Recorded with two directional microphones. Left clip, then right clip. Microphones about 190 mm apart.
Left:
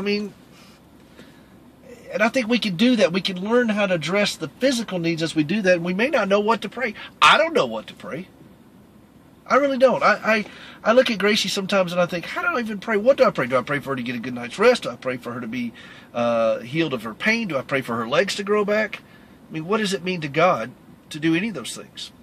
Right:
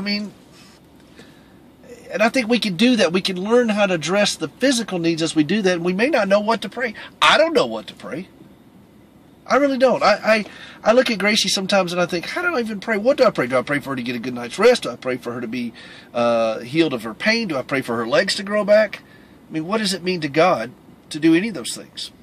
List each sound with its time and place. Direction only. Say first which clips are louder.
2.0 s a man's voice: right 2 dB; 15° right (ahead or behind)
9.5 s a man's voice: right 1 dB; 15° right (ahead or behind)